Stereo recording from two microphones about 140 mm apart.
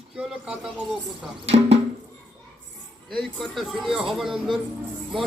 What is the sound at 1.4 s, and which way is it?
Music, 50° right (ahead or behind).